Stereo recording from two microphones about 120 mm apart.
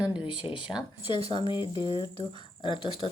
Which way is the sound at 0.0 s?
10° right (ahead or behind).